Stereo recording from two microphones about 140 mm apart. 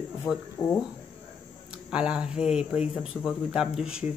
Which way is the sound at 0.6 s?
20° left (ahead or behind).